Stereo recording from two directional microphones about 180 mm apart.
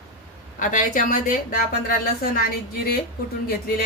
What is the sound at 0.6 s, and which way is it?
A woman's voice, 45° left (ahead or behind).